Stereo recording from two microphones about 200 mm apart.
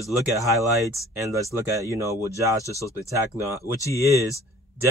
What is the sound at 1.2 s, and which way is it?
A man's voice, 15° right (ahead or behind).